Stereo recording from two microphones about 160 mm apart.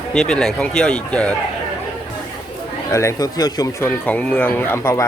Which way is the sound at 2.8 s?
20° left (ahead or behind).